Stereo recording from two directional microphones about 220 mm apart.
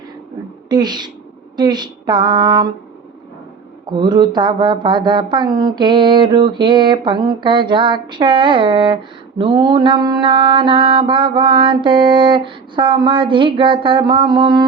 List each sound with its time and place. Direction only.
0.7 s mantra: 20° right (ahead or behind)
3.9 s mantra: 20° right (ahead or behind)